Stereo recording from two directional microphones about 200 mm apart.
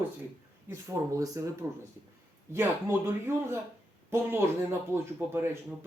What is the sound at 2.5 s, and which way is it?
Speech, 10° right (ahead or behind).